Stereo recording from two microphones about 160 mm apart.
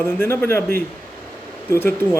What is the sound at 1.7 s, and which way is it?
Speech, 15° left (ahead or behind).